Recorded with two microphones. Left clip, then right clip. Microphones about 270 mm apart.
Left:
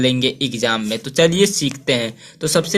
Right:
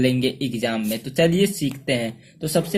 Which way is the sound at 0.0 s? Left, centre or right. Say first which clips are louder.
Left 4 dB; centre.